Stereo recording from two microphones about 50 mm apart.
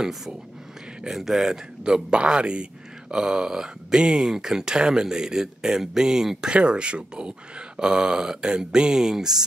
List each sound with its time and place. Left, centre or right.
1.1 s speech: centre